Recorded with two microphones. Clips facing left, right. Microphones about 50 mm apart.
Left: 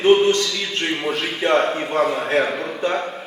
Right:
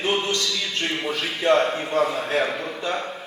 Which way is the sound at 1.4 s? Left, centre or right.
Left.